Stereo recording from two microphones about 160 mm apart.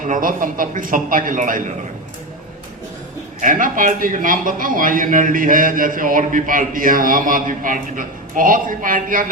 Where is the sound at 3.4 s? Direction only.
55° right (ahead or behind).